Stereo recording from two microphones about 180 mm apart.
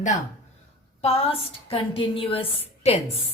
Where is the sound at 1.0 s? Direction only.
35° left (ahead or behind).